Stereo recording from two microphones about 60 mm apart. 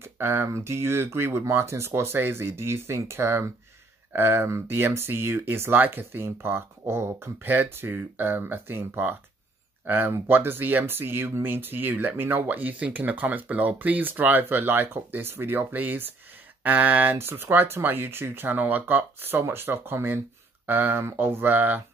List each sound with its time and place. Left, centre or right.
0.0 s speech: right